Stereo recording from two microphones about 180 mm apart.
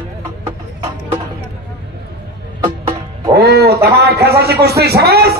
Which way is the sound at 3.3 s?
60° right (ahead or behind).